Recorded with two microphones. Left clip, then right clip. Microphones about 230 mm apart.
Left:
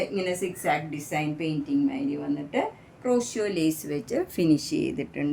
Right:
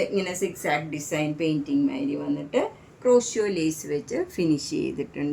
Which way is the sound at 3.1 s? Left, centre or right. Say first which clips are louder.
Right 5 dB; left.